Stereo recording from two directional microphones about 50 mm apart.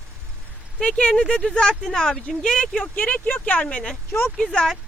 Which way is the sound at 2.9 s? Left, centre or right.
Left.